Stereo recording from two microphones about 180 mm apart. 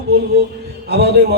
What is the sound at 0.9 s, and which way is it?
Speech, 65° right (ahead or behind).